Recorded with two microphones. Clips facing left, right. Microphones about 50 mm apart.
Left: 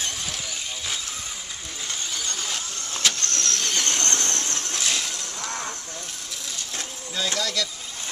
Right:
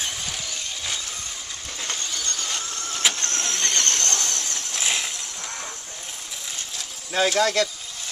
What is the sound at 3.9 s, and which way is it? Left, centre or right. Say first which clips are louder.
Vehicle: left 1 dB; left.